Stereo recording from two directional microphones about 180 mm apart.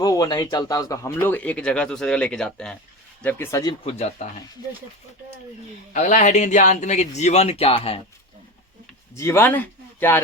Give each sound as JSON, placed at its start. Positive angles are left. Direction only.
{"t": 0.0, "sound": "speech", "side_deg": 20}
{"t": 3.9, "sound": "speech", "side_deg": 40}
{"t": 5.9, "sound": "speech", "side_deg": 45}
{"t": 9.1, "sound": "speech", "side_deg": 15}